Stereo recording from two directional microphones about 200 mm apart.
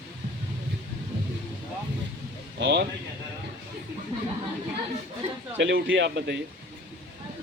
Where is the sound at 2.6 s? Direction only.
60° right (ahead or behind).